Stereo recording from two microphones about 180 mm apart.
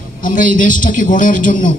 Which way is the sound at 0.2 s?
50° left (ahead or behind).